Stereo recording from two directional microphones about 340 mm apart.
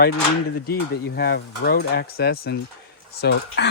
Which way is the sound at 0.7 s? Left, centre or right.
Left.